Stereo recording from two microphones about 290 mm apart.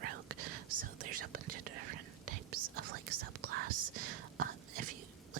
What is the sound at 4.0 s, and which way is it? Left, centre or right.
Whispering, right.